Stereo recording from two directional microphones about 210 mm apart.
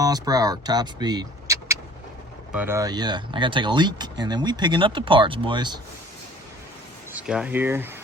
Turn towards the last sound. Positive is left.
turn(degrees=-10)  # may be behind; listen again after turning